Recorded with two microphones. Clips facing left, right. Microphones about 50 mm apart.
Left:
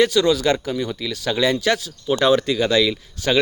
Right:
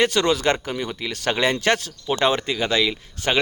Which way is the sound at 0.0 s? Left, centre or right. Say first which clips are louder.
Left 2 dB; right.